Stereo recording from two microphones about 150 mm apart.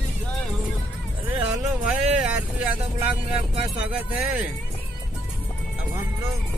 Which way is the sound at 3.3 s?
45° right (ahead or behind).